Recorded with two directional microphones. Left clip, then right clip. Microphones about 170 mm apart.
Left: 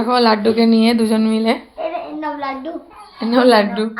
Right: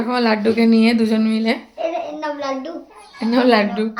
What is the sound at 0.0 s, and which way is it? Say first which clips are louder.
Speech: left 4 dB; 5° left (ahead or behind).